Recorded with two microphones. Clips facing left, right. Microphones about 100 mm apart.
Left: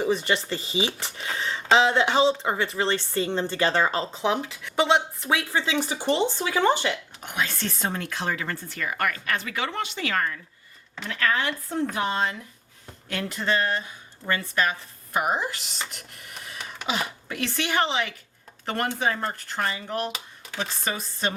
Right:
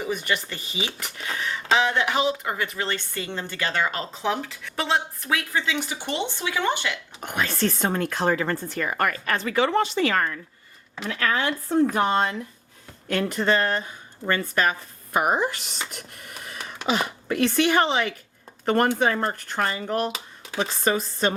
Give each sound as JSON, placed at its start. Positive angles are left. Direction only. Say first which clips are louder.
{"t": 0.0, "sound": "speech", "louder": "left 3 dB", "side_deg": 30}
{"t": 7.2, "sound": "speech", "louder": "right 4 dB", "side_deg": -50}
{"t": 11.9, "sound": "speech", "louder": "right 4 dB", "side_deg": -50}